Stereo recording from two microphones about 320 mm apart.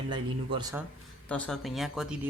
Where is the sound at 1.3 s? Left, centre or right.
Centre.